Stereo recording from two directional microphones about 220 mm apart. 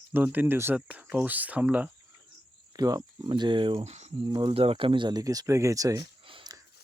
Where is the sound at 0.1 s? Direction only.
10° right (ahead or behind).